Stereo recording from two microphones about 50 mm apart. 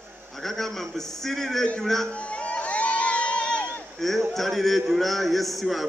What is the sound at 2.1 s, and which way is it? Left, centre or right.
Crowd, left.